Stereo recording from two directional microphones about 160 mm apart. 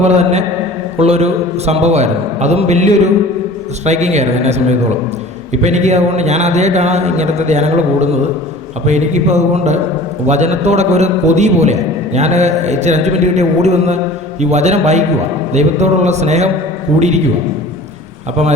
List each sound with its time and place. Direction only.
0.2 s a man's voice: 45° right (ahead or behind)